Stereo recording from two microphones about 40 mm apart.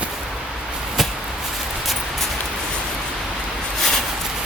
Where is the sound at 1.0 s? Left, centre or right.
Centre.